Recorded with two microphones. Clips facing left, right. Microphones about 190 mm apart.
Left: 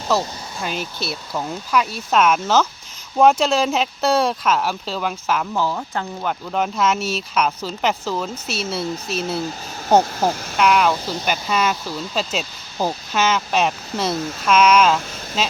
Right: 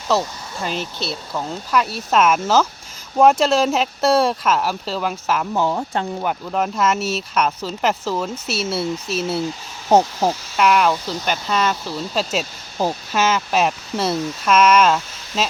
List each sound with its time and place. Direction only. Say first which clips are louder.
0.6 s speech: right 1 dB; centre (ahead or behind)
5.5 s speech: right 2 dB; 25° right (ahead or behind)
6.2 s speech: right 1 dB; 5° right (ahead or behind)
10.6 s speech: even; centre (ahead or behind)